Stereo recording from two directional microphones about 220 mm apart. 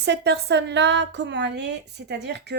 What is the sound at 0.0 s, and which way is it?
Speech, 50° right (ahead or behind).